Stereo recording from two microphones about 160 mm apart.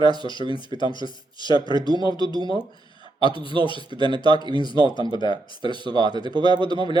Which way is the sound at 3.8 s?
30° right (ahead or behind).